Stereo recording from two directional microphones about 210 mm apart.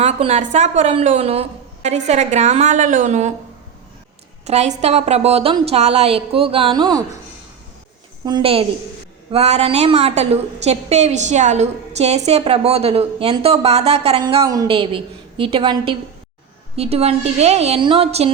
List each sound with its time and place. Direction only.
0.0 s a woman's voice: 30° right (ahead or behind)
4.4 s a woman's voice: 30° right (ahead or behind)
8.2 s a woman's voice: 20° right (ahead or behind)